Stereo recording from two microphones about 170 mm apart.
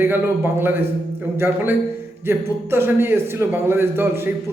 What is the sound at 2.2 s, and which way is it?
A man's voice, 15° right (ahead or behind).